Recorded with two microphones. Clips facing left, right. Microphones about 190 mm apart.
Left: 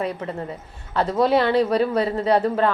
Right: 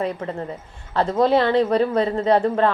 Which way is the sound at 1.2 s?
25° right (ahead or behind).